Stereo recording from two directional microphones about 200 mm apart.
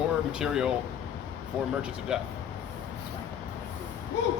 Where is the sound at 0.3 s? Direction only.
5° right (ahead or behind).